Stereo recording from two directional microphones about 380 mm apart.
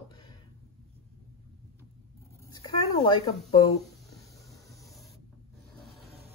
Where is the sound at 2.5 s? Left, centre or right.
Centre.